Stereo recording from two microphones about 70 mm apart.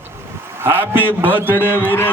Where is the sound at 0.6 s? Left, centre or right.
Right.